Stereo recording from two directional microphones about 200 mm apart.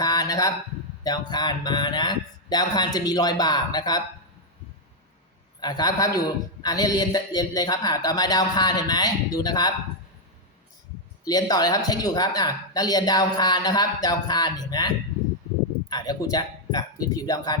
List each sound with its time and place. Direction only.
0.0 s a sound: 20° left (ahead or behind)
1.0 s a man's voice: 20° left (ahead or behind)
5.5 s a man's voice: 20° left (ahead or behind)
11.3 s a man's voice: 20° left (ahead or behind)